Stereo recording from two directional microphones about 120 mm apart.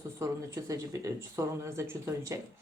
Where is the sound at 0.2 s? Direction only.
25° right (ahead or behind).